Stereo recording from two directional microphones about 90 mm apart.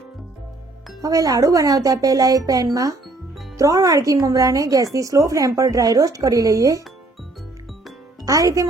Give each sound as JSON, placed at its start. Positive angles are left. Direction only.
{"t": 1.0, "sound": "a woman's voice", "side_deg": -40}
{"t": 8.2, "sound": "a child's voice", "side_deg": -40}